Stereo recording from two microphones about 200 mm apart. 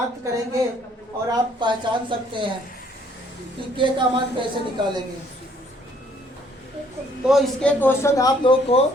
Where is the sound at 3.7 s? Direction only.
25° right (ahead or behind).